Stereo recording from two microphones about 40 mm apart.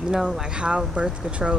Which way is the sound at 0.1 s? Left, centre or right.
Centre.